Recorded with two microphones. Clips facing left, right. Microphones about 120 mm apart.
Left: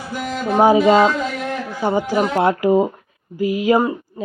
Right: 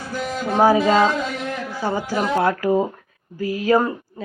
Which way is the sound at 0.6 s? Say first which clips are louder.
Left 3 dB; 20° left (ahead or behind).